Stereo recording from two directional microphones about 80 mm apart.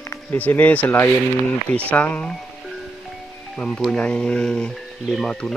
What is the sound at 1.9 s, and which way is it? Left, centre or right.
Speech, centre.